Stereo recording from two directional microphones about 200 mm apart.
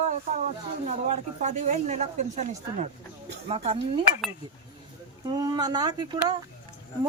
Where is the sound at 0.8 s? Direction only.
35° right (ahead or behind).